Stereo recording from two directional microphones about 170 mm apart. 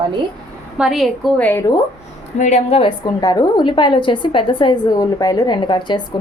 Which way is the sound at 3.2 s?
25° left (ahead or behind).